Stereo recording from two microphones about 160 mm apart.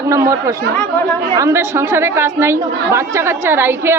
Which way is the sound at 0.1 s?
20° right (ahead or behind).